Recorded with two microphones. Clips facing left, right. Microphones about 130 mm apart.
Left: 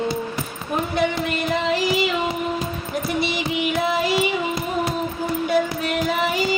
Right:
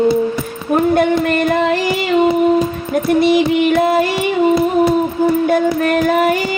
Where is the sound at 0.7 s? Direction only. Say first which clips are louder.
Right 9 dB; 55° right (ahead or behind).